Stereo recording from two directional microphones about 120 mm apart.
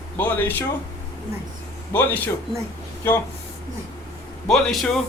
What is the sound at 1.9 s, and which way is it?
Speech, 15° left (ahead or behind).